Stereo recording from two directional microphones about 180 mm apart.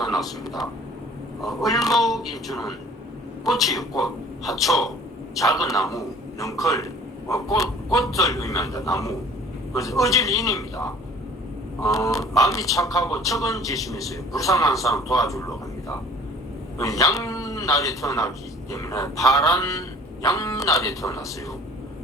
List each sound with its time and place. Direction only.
0.0 s a sound: centre (ahead or behind)
1.4 s speech: centre (ahead or behind)
5.5 s a man's voice: 20° left (ahead or behind)